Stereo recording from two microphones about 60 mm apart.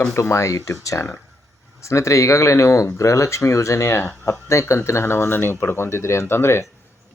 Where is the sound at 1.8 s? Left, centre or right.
Left.